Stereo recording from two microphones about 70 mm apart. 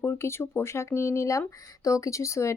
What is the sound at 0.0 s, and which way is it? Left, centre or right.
A woman's voice, left.